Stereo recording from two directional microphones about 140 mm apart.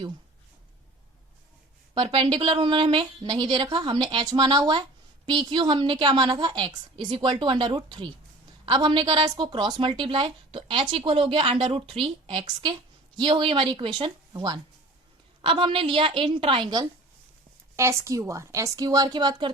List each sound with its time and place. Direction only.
2.0 s a woman's voice: 35° right (ahead or behind)
17.7 s a woman's voice: 20° right (ahead or behind)